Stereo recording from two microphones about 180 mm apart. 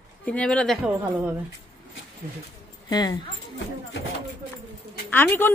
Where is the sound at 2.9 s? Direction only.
25° left (ahead or behind).